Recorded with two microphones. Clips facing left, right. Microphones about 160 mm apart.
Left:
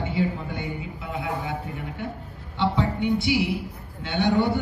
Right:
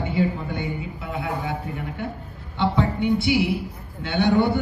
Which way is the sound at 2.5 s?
50° right (ahead or behind).